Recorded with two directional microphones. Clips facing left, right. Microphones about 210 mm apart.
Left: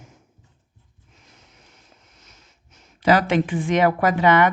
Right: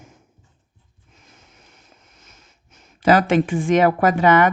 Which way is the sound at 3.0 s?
45° right (ahead or behind).